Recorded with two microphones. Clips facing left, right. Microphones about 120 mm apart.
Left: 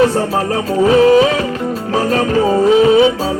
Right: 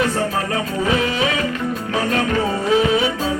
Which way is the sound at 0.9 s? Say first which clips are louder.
Left 12 dB; 35° left (ahead or behind).